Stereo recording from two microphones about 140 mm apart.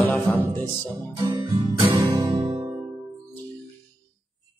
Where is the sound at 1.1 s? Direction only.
30° right (ahead or behind).